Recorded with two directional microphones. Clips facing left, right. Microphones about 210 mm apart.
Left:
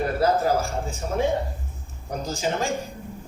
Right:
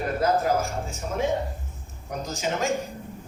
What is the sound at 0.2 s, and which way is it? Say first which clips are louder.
Speech: left 1 dB; 30° left (ahead or behind).